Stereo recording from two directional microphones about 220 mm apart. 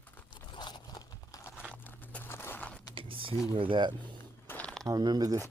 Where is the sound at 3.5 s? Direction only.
25° right (ahead or behind).